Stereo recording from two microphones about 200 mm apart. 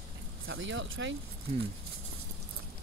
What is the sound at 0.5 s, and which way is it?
Speech, 70° right (ahead or behind).